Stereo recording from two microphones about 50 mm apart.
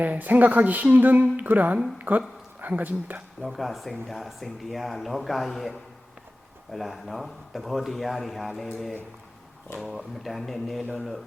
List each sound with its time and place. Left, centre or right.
0.0 s a woman's voice: right
3.4 s speech: centre
9.7 s speech: centre